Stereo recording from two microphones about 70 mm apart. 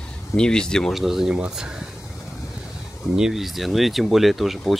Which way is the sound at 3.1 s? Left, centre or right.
Centre.